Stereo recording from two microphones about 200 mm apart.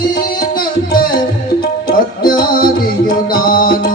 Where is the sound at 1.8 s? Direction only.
45° left (ahead or behind).